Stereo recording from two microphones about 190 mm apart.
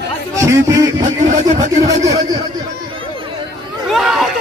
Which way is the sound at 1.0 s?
40° right (ahead or behind).